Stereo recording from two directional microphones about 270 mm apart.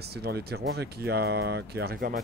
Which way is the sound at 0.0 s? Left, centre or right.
Right.